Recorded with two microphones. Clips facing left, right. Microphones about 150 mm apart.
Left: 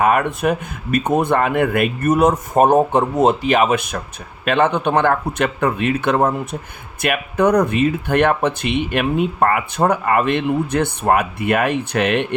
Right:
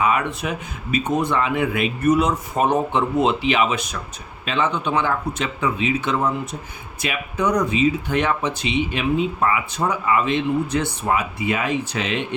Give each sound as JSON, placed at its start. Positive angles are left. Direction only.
{"t": 0.0, "sound": "speech", "side_deg": 55}